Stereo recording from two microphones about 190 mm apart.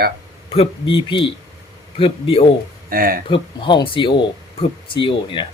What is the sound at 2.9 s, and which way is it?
Speech, 50° right (ahead or behind).